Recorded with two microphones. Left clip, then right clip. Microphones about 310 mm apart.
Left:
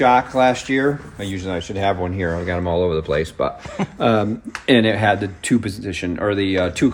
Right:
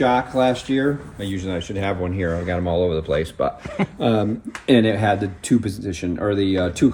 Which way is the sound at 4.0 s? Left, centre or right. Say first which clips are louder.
Left 3 dB; centre.